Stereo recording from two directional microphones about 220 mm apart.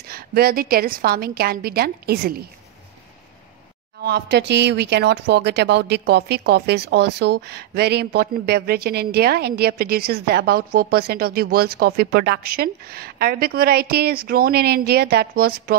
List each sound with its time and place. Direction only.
0.1 s speech: 45° right (ahead or behind)
4.0 s speech: 45° right (ahead or behind)